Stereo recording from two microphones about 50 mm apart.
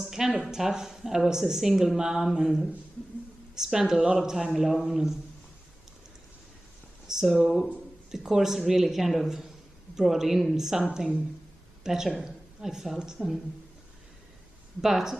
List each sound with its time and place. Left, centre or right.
0.0 s a sound: centre
0.5 s a man's voice: centre
7.1 s speech: centre
10.8 s a man's voice: centre
14.8 s speech: centre